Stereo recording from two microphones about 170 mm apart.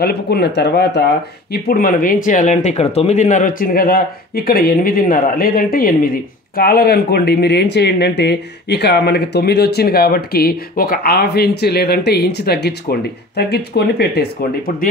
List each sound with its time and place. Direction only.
0.0 s speech: 70° left (ahead or behind)
1.5 s speech: 60° left (ahead or behind); by 14.2 s 75° left (ahead or behind)